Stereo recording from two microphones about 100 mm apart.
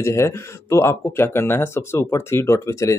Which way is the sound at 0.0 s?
25° left (ahead or behind).